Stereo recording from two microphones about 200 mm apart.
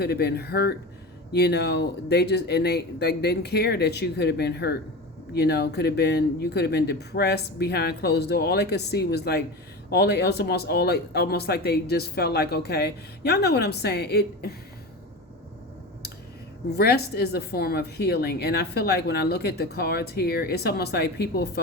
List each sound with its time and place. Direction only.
0.0 s a woman's voice: 55° left (ahead or behind)
16.7 s a woman's voice: 55° left (ahead or behind)